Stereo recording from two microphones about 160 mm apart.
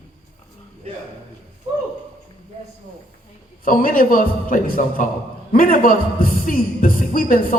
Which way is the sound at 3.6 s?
60° left (ahead or behind).